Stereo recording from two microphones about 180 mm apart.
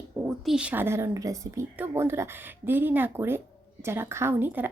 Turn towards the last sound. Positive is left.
turn(degrees=-10)  # may be behind; listen again after turning